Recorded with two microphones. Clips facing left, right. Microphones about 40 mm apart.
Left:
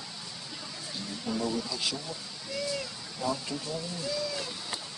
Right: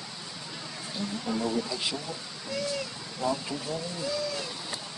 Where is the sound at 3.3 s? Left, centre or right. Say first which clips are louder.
Right 2 dB; centre.